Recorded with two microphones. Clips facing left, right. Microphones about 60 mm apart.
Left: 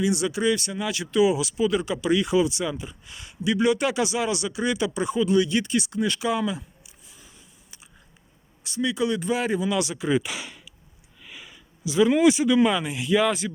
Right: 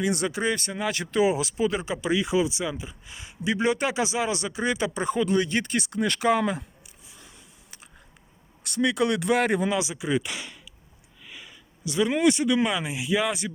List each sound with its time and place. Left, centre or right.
0.0 s speech: right
8.6 s speech: right
9.7 s speech: centre
10.2 s speech: centre
11.2 s a sound: centre
12.8 s speech: centre